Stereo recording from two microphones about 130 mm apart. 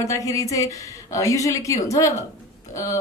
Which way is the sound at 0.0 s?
25° left (ahead or behind).